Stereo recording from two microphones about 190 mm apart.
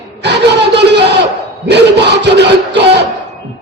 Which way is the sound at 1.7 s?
65° right (ahead or behind).